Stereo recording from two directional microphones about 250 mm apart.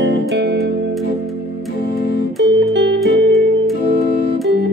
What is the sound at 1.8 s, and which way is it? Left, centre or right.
Organ, left.